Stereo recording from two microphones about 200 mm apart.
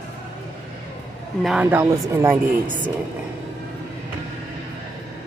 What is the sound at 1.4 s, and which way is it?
Speech, 5° right (ahead or behind).